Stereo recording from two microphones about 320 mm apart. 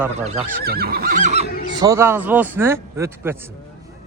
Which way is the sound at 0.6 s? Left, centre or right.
Right.